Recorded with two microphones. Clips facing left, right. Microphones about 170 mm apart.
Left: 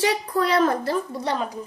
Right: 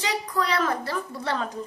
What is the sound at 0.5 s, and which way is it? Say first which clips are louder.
Speech: left 6 dB; 40° left (ahead or behind).